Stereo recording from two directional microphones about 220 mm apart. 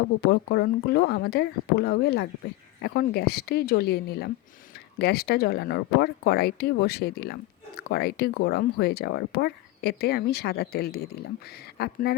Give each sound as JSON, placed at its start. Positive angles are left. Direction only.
{"t": 0.5, "sound": "speech", "side_deg": 45}